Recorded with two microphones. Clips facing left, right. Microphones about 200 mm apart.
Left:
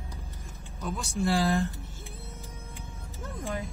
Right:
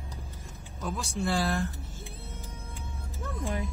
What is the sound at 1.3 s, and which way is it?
Speech, 15° left (ahead or behind).